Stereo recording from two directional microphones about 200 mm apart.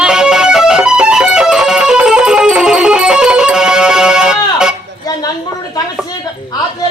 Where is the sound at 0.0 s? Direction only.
5° right (ahead or behind).